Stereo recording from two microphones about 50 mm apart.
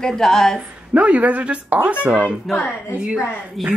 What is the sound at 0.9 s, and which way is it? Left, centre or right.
Speech, right.